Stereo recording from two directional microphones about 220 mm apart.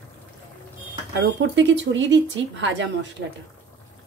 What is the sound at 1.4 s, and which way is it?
Speech, 55° right (ahead or behind).